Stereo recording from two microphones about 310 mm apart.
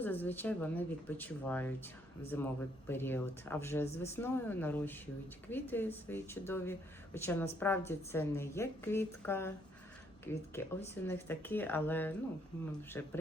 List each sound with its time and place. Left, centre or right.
0.0 s speech: centre